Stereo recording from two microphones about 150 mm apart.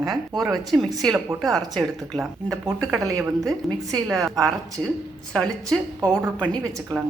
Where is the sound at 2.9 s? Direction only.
20° right (ahead or behind).